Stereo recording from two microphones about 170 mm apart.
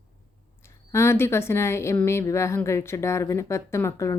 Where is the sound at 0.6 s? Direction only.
15° left (ahead or behind).